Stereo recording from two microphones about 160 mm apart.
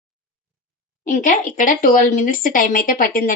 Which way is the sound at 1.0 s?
50° left (ahead or behind).